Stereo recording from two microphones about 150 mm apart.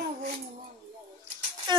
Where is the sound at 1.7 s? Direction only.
30° right (ahead or behind).